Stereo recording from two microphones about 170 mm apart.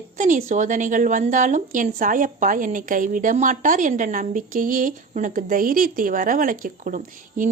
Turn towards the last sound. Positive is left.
turn(degrees=-50)  # may be behind; listen again after turning